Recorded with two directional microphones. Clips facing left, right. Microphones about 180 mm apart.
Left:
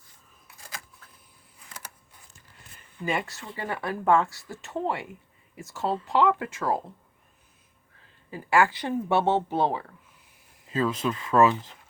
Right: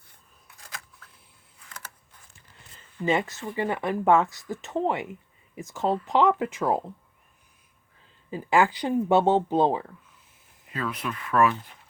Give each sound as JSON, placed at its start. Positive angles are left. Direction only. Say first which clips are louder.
{"t": 0.4, "sound": "scissors", "louder": "left 1 dB", "side_deg": 0}
{"t": 3.0, "sound": "speech", "louder": "right 5 dB", "side_deg": -20}
{"t": 8.3, "sound": "speech", "louder": "right 1 dB", "side_deg": -20}
{"t": 10.7, "sound": "speech", "louder": "left 5 dB", "side_deg": 25}